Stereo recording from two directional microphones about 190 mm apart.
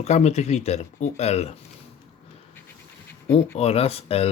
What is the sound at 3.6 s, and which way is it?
Speech, 30° left (ahead or behind).